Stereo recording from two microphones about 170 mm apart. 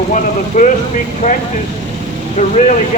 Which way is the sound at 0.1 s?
45° left (ahead or behind).